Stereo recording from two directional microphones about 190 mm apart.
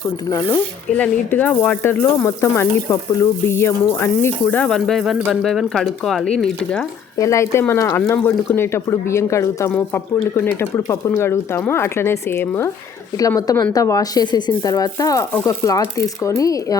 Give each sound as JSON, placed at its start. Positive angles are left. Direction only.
{"t": 0.3, "sound": "speech", "side_deg": 15}
{"t": 7.2, "sound": "speech", "side_deg": 15}